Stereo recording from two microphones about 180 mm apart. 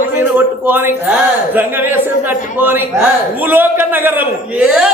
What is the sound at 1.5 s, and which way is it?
A man's voice, 10° right (ahead or behind).